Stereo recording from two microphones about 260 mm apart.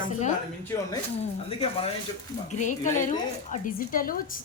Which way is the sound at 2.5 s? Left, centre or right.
Left.